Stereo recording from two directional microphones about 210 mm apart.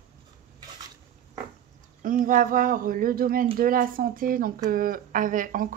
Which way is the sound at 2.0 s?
40° right (ahead or behind).